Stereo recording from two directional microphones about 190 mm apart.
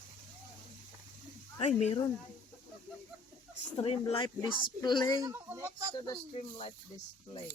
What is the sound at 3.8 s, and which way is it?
Speech, 30° left (ahead or behind).